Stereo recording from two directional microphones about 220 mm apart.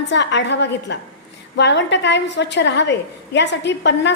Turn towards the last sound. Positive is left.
turn(degrees=55)  # may be behind; listen again after turning